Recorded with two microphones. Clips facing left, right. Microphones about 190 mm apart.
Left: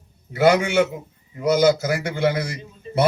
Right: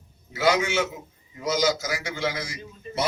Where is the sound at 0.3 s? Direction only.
60° left (ahead or behind).